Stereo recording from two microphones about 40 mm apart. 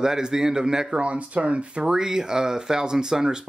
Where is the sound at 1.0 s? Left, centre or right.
Right.